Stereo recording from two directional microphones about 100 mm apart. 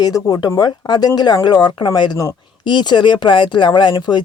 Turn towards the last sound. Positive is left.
turn(degrees=45)  # may be behind; listen again after turning